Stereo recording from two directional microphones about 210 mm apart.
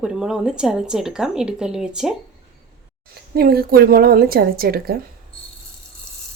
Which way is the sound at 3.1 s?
50° right (ahead or behind).